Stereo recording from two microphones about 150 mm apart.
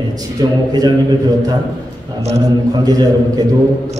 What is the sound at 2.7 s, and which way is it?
Speech, 25° right (ahead or behind).